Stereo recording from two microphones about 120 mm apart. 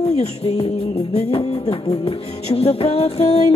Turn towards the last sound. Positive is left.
turn(degrees=60)  # may be behind; listen again after turning